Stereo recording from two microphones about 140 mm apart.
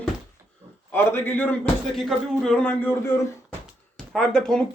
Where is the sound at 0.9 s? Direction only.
15° left (ahead or behind).